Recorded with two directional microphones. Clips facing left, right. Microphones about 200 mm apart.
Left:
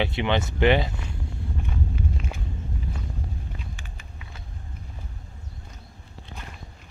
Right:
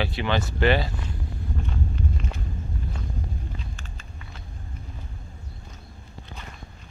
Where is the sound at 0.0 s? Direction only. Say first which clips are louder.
Left 2 dB; 20° left (ahead or behind).